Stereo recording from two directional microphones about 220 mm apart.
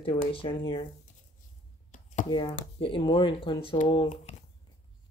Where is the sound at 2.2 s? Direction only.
20° left (ahead or behind).